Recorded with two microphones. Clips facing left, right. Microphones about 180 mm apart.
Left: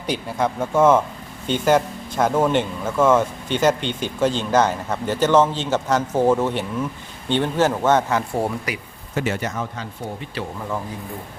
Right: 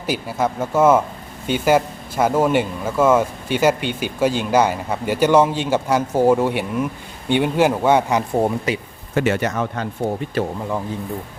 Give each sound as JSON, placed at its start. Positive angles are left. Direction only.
{"t": 0.0, "sound": "speech", "side_deg": -5}
{"t": 9.1, "sound": "speech", "side_deg": -70}
{"t": 10.4, "sound": "speech", "side_deg": -45}